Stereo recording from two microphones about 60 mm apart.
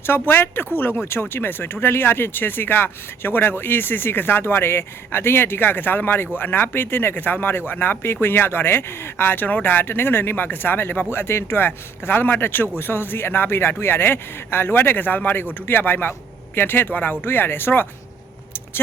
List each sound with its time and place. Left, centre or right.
0.0 s speech: left